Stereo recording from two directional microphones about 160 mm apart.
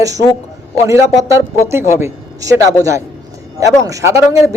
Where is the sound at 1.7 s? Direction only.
15° right (ahead or behind).